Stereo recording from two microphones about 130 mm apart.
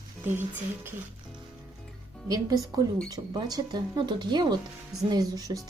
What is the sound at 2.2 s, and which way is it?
Speech, 30° right (ahead or behind).